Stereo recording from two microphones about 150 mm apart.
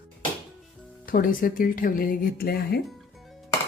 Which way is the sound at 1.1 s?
70° left (ahead or behind).